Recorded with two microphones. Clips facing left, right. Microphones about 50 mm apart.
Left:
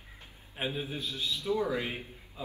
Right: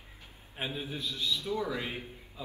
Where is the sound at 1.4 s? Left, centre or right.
Left.